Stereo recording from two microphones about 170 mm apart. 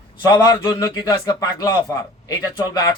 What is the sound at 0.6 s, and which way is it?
A man's voice, 20° left (ahead or behind).